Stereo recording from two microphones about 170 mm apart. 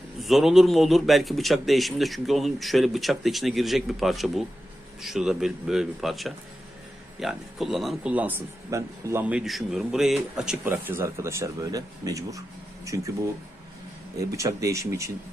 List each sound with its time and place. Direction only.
0.2 s a man's voice: centre (ahead or behind); by 13.1 s 20° right (ahead or behind)
14.3 s a man's voice: 20° right (ahead or behind)